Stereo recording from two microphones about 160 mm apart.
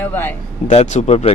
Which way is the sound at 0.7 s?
45° left (ahead or behind).